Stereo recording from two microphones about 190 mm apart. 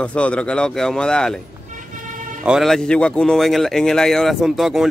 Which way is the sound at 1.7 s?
45° right (ahead or behind).